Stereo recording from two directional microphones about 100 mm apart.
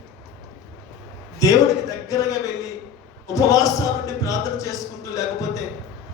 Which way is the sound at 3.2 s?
35° left (ahead or behind).